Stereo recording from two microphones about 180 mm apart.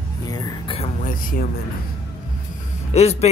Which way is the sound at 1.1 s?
50° left (ahead or behind).